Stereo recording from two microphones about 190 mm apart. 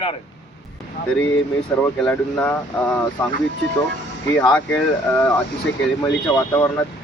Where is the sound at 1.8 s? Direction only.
5° left (ahead or behind).